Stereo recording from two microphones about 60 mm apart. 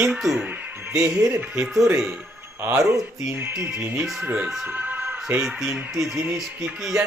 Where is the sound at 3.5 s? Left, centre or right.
Right.